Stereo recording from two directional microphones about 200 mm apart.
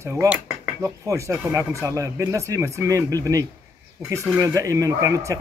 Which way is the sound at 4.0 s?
5° right (ahead or behind).